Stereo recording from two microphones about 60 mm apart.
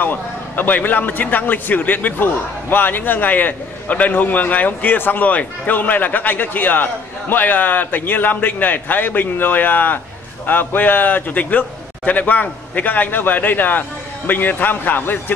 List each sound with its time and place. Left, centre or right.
0.0 s a man's voice: left